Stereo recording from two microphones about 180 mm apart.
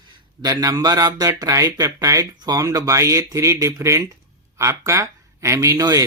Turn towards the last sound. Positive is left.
turn(degrees=-20)  # may be behind; listen again after turning